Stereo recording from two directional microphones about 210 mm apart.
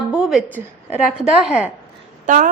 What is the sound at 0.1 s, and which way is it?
A woman's voice, 5° right (ahead or behind).